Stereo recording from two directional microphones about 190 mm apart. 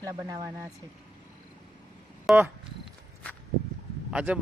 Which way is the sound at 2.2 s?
10° right (ahead or behind).